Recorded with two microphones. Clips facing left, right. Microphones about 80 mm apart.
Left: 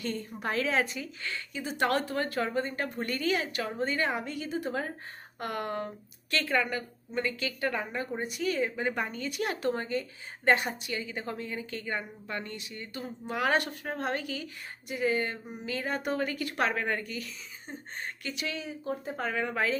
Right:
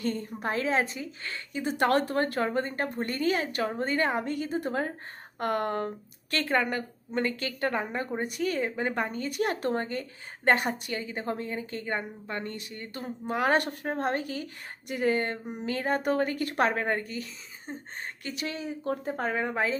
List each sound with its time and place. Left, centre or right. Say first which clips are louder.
0.0 s a woman's voice: right 3 dB; right